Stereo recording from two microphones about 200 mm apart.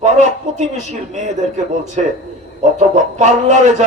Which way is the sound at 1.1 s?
35° right (ahead or behind).